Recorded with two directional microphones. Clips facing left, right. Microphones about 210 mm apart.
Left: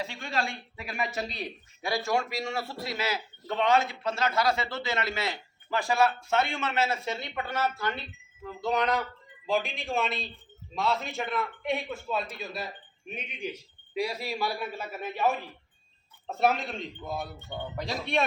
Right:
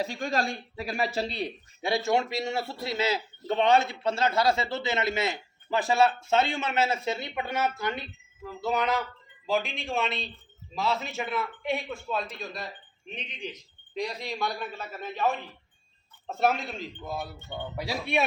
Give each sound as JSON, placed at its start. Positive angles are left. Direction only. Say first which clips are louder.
{"t": 0.0, "sound": "a man's voice", "louder": "right 4 dB", "side_deg": -40}
{"t": 8.4, "sound": "a man's voice", "louder": "even", "side_deg": -5}